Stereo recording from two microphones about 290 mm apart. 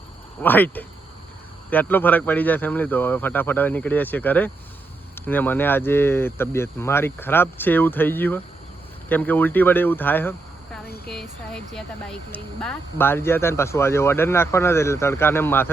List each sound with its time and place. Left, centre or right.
0.4 s speech: centre
10.8 s speech: left
11.7 s speech: centre